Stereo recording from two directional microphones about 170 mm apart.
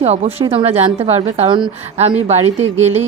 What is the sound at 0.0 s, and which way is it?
A woman's voice, 40° right (ahead or behind).